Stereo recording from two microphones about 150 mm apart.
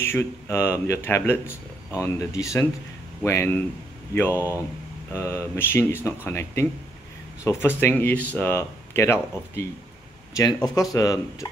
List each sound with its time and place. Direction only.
0.0 s speech: 15° left (ahead or behind)